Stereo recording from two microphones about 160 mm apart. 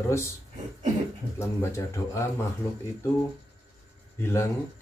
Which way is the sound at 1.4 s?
15° left (ahead or behind).